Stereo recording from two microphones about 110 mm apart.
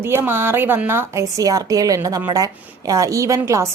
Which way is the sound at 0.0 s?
20° right (ahead or behind).